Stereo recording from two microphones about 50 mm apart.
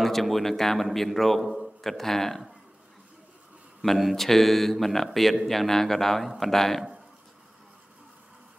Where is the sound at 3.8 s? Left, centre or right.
Centre.